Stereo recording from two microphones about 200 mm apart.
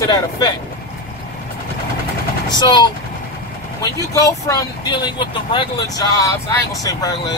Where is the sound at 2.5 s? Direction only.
20° left (ahead or behind).